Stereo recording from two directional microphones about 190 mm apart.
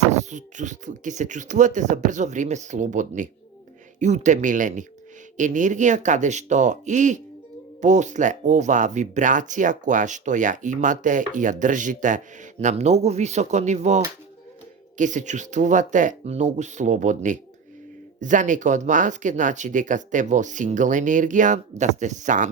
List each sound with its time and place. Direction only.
0.1 s speech: 40° right (ahead or behind)